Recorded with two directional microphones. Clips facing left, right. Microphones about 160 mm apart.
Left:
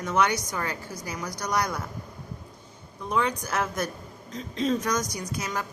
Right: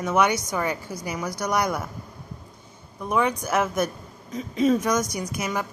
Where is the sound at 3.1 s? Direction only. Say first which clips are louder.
Right 4 dB; 15° right (ahead or behind).